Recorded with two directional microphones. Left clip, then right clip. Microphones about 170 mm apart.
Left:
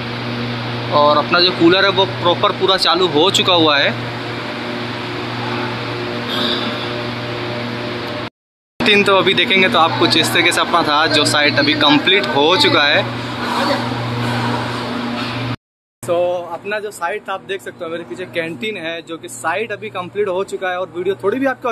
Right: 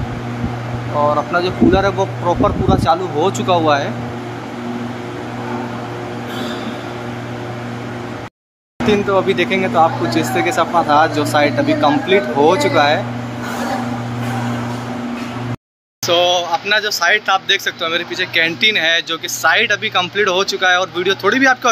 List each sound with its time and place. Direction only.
0.9 s speech: 25° left (ahead or behind)
1.3 s speech: centre (ahead or behind)
9.3 s speech: 5° right (ahead or behind)
16.1 s speech: 5° left (ahead or behind)